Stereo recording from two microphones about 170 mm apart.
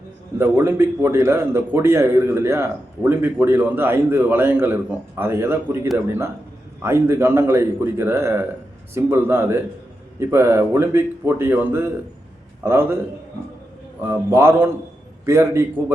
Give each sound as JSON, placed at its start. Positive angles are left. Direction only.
{"t": 0.3, "sound": "a man's voice", "side_deg": -15}
{"t": 14.0, "sound": "a man's voice", "side_deg": -15}